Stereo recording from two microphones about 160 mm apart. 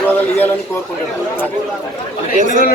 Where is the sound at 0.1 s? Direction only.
10° left (ahead or behind).